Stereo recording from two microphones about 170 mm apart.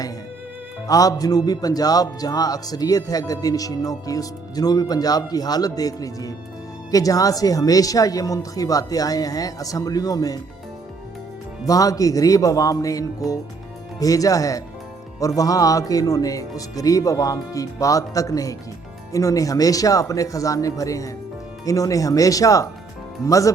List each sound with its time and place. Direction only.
0.9 s a man's voice: 20° left (ahead or behind)
11.6 s a man's voice: 20° left (ahead or behind)